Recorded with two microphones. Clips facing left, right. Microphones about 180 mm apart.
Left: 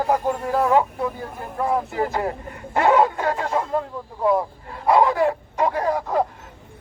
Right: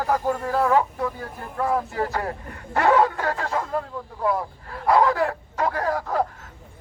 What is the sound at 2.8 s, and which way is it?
Bow-wow, 20° left (ahead or behind).